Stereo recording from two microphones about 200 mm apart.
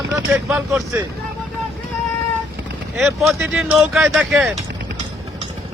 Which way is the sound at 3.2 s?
Centre (ahead or behind).